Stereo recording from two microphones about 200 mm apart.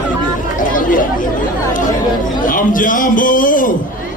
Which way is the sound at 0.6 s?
40° left (ahead or behind).